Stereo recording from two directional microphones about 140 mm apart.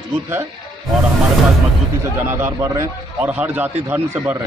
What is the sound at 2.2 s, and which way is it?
Speech, 15° right (ahead or behind).